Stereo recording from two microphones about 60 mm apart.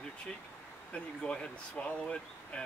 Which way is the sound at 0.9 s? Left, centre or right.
Centre.